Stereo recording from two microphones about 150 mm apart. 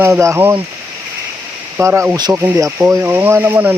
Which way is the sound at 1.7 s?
15° right (ahead or behind).